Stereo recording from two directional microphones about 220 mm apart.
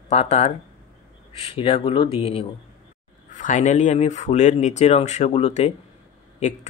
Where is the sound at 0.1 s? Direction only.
30° left (ahead or behind).